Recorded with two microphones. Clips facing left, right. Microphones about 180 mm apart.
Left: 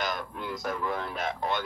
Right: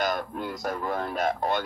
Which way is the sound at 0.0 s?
45° right (ahead or behind).